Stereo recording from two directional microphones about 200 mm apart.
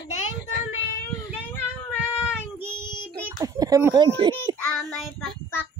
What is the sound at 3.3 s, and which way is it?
Speech, 20° right (ahead or behind).